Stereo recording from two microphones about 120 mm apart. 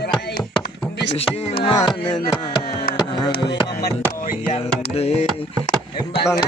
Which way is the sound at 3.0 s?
35° left (ahead or behind).